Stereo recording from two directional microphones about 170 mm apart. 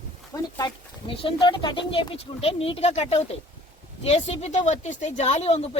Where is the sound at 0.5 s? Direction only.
30° left (ahead or behind).